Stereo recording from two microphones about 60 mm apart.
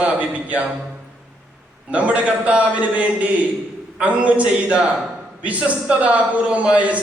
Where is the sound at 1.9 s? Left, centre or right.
Right.